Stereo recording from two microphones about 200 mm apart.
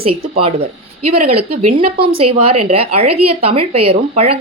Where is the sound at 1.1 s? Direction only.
30° right (ahead or behind).